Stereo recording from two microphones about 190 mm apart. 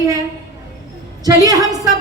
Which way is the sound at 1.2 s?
20° right (ahead or behind).